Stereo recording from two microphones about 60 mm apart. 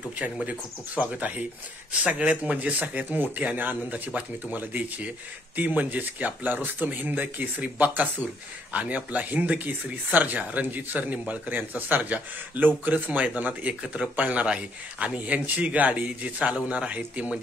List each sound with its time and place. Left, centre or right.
0.5 s speech: right